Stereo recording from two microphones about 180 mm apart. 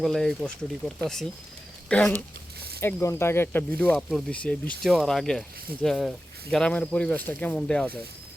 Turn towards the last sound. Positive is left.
turn(degrees=5)  # may be behind; listen again after turning